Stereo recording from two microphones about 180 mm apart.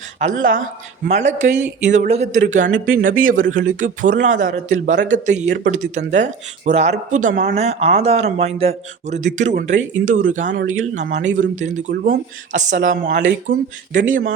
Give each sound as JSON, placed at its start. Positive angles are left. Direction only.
{"t": 0.2, "sound": "speech", "side_deg": -45}